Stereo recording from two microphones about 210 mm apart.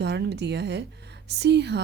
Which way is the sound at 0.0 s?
55° right (ahead or behind).